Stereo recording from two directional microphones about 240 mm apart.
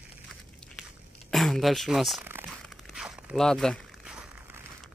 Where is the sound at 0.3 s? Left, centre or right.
Centre.